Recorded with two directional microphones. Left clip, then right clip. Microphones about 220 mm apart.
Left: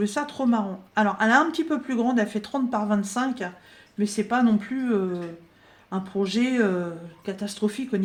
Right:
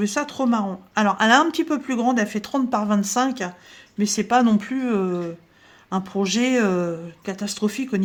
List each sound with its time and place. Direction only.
0.0 s speech: 30° right (ahead or behind)